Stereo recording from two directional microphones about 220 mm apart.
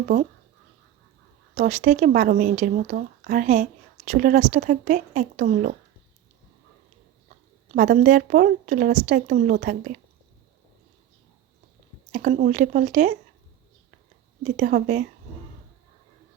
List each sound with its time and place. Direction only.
0.1 s speech: 35° right (ahead or behind)
1.5 s speech: 35° right (ahead or behind)
7.7 s speech: 35° right (ahead or behind)
12.1 s speech: 35° right (ahead or behind)
14.4 s speech: 35° right (ahead or behind)